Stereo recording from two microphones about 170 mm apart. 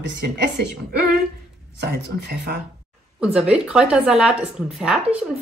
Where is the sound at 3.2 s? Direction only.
5° right (ahead or behind).